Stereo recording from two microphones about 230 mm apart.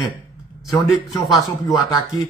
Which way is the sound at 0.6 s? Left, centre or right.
Centre.